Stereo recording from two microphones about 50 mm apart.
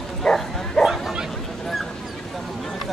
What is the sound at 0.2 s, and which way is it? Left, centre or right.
Bow-wow, centre.